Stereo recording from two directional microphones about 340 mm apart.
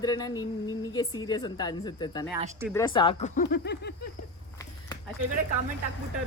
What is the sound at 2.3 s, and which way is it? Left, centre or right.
Speech, centre.